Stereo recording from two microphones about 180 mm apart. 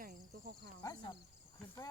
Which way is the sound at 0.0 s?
55° right (ahead or behind).